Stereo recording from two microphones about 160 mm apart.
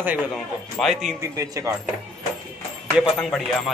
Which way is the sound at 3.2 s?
5° left (ahead or behind).